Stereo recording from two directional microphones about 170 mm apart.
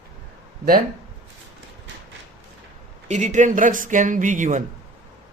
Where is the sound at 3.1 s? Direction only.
45° right (ahead or behind).